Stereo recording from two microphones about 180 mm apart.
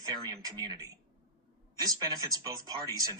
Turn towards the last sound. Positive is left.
turn(degrees=-20)  # may be behind; listen again after turning